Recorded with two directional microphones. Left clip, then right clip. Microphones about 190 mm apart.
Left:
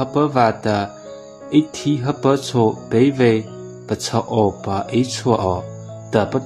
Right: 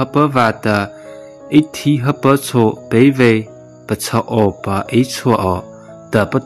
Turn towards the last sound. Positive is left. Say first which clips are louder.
# right 3 dB
turn(degrees=-25)  # may be behind; listen again after turning